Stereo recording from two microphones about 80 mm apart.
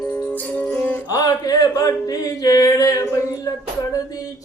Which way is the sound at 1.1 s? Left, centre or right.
Left.